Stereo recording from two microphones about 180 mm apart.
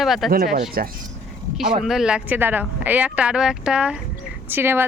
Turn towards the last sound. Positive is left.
turn(degrees=-10)  # may be behind; listen again after turning